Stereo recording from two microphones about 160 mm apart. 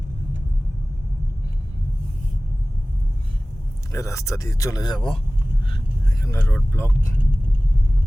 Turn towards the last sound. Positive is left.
turn(degrees=15)  # may be behind; listen again after turning